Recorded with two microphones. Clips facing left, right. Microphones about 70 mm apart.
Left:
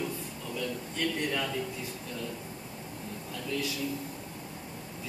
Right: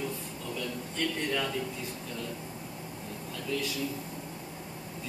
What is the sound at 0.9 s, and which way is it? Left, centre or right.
Speech, centre.